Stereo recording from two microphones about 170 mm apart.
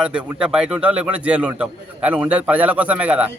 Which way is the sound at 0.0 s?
5° right (ahead or behind).